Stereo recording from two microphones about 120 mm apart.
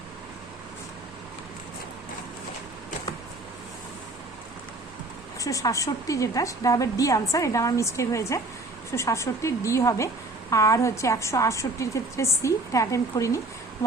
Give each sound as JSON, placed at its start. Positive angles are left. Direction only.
{"t": 5.4, "sound": "a woman's voice", "side_deg": 25}